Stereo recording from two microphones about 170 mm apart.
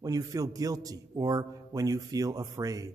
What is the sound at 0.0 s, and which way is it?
A man's voice, 20° right (ahead or behind).